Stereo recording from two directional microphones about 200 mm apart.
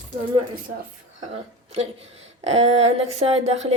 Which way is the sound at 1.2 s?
35° right (ahead or behind).